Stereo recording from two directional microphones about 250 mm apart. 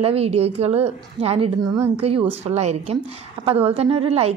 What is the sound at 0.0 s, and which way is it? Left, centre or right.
A woman's voice, right.